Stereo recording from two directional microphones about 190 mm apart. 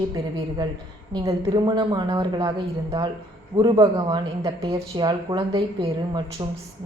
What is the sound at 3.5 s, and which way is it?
A woman's voice, 25° right (ahead or behind).